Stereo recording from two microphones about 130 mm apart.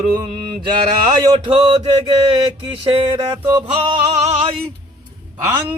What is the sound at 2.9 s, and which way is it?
Music, 45° right (ahead or behind).